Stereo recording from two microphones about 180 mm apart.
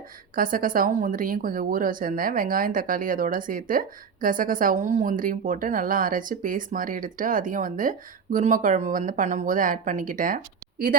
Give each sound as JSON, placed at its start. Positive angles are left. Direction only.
{"t": 0.3, "sound": "a woman's voice", "side_deg": -50}